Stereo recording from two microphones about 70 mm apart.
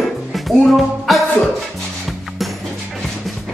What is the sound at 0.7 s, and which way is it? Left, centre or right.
Speech, centre.